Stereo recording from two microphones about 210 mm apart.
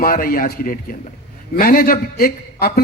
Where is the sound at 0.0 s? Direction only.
40° left (ahead or behind).